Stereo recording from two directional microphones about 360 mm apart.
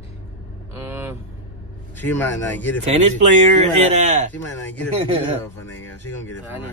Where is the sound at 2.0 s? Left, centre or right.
Centre.